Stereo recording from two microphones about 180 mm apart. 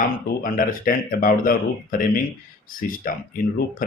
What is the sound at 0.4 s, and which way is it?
Speech, 50° left (ahead or behind).